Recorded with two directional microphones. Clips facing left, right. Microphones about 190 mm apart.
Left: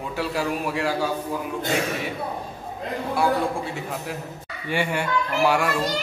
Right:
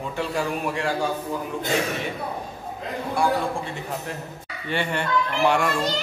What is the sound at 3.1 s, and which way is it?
A man's voice, 5° left (ahead or behind).